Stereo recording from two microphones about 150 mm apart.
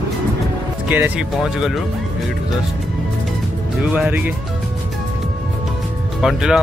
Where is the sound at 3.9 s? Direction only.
10° right (ahead or behind).